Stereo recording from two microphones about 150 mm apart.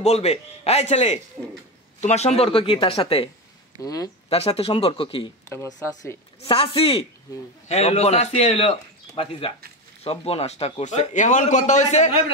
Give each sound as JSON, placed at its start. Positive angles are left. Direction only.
{"t": 0.0, "sound": "a man's voice", "side_deg": 45}
{"t": 3.8, "sound": "speech", "side_deg": 25}
{"t": 4.6, "sound": "speech", "side_deg": 40}
{"t": 5.5, "sound": "speech", "side_deg": 20}
{"t": 6.4, "sound": "a man's voice", "side_deg": 40}